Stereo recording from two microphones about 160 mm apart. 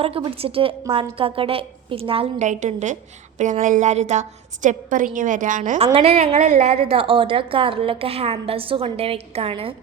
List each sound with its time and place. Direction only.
0.3 s a woman's voice: 35° right (ahead or behind)
2.5 s a woman's voice: 50° right (ahead or behind)